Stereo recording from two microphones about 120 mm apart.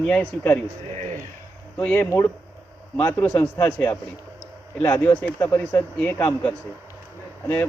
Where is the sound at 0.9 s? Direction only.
70° right (ahead or behind).